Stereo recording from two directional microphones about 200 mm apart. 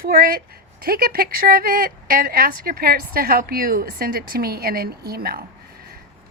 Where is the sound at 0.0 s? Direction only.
50° right (ahead or behind).